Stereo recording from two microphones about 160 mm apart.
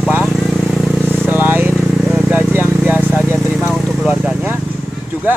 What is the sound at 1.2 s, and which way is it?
Vehicle, 10° right (ahead or behind).